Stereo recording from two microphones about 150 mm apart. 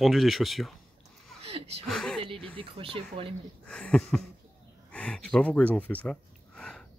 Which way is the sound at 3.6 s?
5° left (ahead or behind).